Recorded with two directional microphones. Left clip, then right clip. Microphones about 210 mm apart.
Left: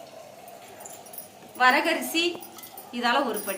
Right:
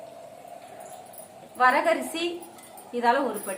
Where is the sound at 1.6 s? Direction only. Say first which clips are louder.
Even; 30° right (ahead or behind).